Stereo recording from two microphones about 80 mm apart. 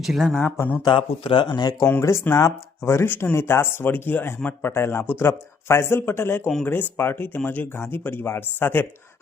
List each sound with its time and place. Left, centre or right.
0.0 s speech: centre
0.3 s speech: left
0.9 s speech: left
2.0 s speech: left